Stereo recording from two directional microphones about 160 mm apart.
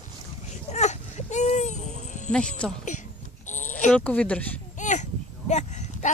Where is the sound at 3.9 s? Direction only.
5° left (ahead or behind).